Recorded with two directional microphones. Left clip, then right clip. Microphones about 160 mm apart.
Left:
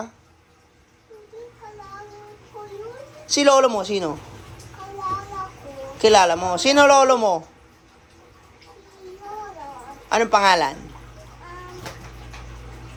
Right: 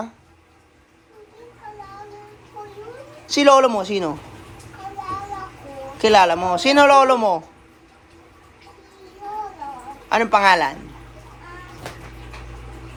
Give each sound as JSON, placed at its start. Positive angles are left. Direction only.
{"t": 3.2, "sound": "a man's voice", "side_deg": 15}
{"t": 6.0, "sound": "a man's voice", "side_deg": 15}
{"t": 10.1, "sound": "a woman's voice", "side_deg": 15}